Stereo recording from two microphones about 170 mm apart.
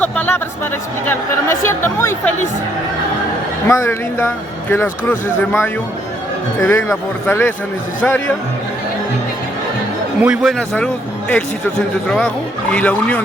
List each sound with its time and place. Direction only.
0.0 s music: 10° left (ahead or behind)
1.0 s speech: 15° left (ahead or behind)
3.7 s speech: 15° left (ahead or behind)
10.2 s a man's voice: 5° right (ahead or behind)
10.6 s speech: 5° left (ahead or behind)